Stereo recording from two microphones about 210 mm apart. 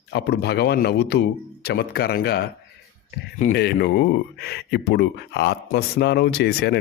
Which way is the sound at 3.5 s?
50° left (ahead or behind).